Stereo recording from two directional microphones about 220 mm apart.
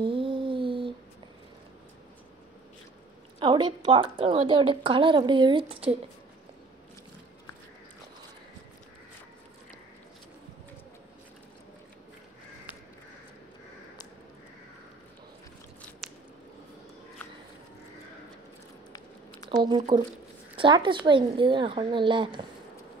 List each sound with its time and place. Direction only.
0.0 s a sound: 25° right (ahead or behind)
3.3 s a woman's voice: 20° right (ahead or behind)
16.0 s squish: centre (ahead or behind)
19.6 s a woman's voice: 20° right (ahead or behind)